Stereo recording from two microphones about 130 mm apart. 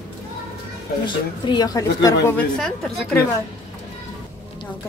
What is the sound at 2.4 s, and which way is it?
Speech, 5° left (ahead or behind).